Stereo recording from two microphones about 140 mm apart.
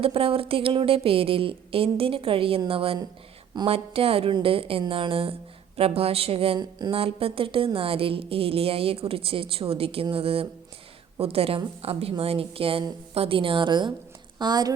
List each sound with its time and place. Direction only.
0.0 s a woman's voice: 40° right (ahead or behind)
6.6 s speech: 30° right (ahead or behind)
6.9 s a woman's voice: 45° right (ahead or behind)